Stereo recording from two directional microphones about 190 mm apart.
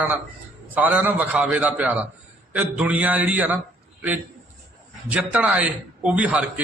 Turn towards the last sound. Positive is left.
turn(degrees=-5)  # may be behind; listen again after turning